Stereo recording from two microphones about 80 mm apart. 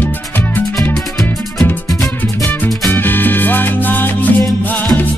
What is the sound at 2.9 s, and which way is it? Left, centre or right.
Salsa music, left.